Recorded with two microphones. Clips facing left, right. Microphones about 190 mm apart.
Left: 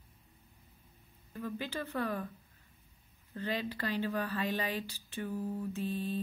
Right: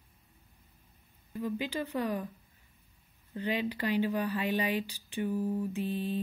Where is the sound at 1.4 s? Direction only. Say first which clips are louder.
Right 5 dB; 15° right (ahead or behind).